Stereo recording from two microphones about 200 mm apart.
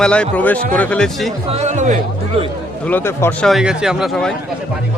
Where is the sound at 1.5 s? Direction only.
35° right (ahead or behind).